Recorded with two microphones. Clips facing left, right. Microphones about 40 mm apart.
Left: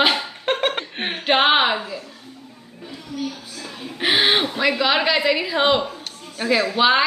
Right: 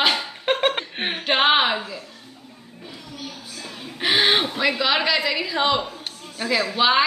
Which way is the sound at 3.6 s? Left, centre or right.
Centre.